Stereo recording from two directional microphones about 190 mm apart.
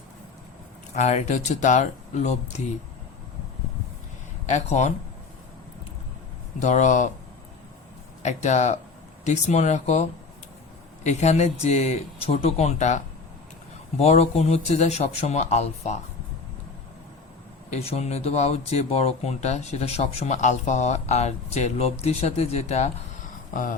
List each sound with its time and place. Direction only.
0.9 s speech: 40° left (ahead or behind)
4.4 s speech: 35° left (ahead or behind)
6.6 s speech: 40° left (ahead or behind)
8.2 s speech: 35° left (ahead or behind)
14.0 s speech: 35° left (ahead or behind)
17.7 s speech: 35° left (ahead or behind)